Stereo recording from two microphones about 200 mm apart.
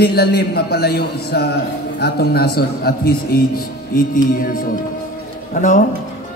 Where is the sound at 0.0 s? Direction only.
50° left (ahead or behind).